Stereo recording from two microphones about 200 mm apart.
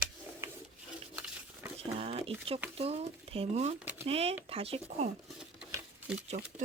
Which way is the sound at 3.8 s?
10° right (ahead or behind).